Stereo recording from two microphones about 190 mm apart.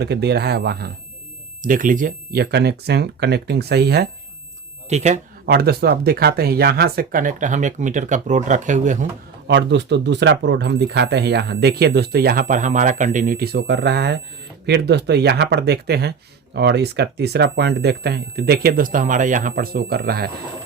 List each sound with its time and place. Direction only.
0.0 s speech: 60° right (ahead or behind)
1.6 s speech: 45° right (ahead or behind)
4.9 s speech: 35° right (ahead or behind)
5.5 s speech: 55° right (ahead or behind); by 9.0 s 40° right (ahead or behind)
9.5 s speech: 65° right (ahead or behind)